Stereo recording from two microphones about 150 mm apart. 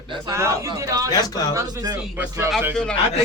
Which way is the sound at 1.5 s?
20° right (ahead or behind).